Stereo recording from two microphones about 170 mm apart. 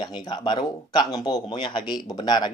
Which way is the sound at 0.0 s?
25° left (ahead or behind).